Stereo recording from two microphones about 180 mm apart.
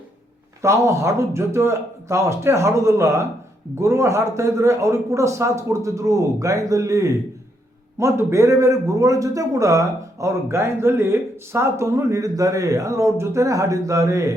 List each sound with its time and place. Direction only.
0.6 s a man's voice: 15° right (ahead or behind)